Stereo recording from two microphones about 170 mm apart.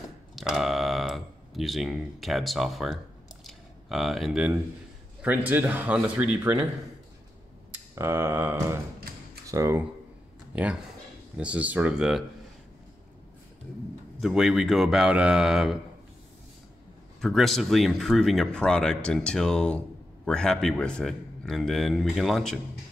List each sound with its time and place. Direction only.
0.4 s a sound: centre (ahead or behind)
5.2 s a man's voice: 10° right (ahead or behind)
7.9 s a man's voice: 15° right (ahead or behind)
14.2 s speech: centre (ahead or behind)
17.2 s speech: centre (ahead or behind)